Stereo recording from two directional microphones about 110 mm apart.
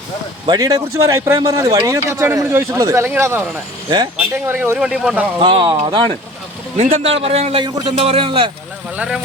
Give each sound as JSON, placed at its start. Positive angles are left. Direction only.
{"t": 0.4, "sound": "speech", "side_deg": -35}
{"t": 3.8, "sound": "speech", "side_deg": -40}
{"t": 4.2, "sound": "speech", "side_deg": -15}
{"t": 5.4, "sound": "speech", "side_deg": -50}
{"t": 6.7, "sound": "a man's voice", "side_deg": -80}
{"t": 9.0, "sound": "speech", "side_deg": -5}